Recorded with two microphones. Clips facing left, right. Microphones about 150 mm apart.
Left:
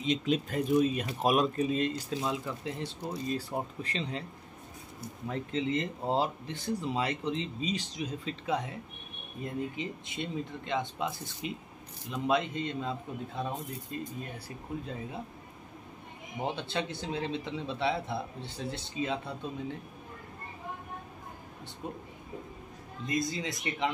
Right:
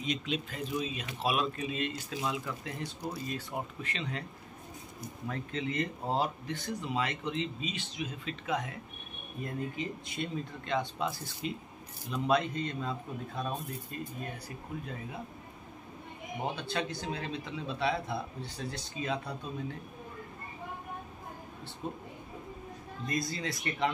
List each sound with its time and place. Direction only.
0.2 s speech: 45° left (ahead or behind)
5.3 s a man's voice: 25° left (ahead or behind)
16.5 s a man's voice: 25° left (ahead or behind)
21.8 s speech: 15° left (ahead or behind)
23.0 s a man's voice: 20° left (ahead or behind)